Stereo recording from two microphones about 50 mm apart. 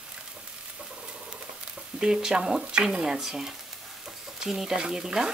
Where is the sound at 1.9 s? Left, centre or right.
Centre.